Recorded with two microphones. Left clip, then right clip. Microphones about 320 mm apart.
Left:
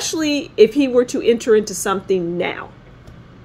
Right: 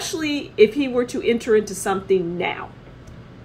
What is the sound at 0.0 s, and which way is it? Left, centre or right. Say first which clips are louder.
Speech: left 5 dB; left.